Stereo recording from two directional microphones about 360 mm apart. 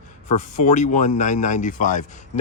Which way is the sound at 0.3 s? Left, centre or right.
Centre.